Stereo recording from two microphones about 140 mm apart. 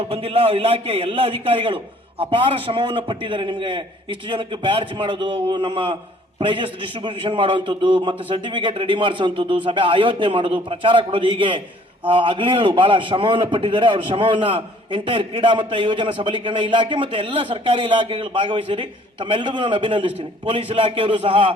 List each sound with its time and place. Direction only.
0.0 s a man's voice: 45° right (ahead or behind)